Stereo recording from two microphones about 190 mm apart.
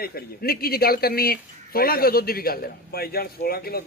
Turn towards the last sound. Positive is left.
turn(degrees=55)  # may be behind; listen again after turning